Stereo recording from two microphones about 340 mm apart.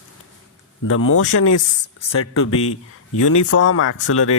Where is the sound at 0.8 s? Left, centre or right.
Left.